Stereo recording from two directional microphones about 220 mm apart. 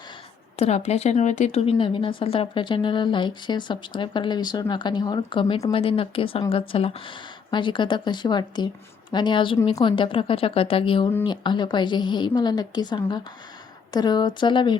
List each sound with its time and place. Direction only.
0.5 s speech: 30° left (ahead or behind)